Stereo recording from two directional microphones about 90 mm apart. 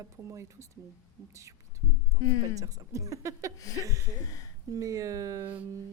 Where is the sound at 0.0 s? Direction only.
35° right (ahead or behind).